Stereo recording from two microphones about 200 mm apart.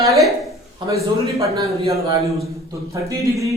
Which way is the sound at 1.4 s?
15° right (ahead or behind).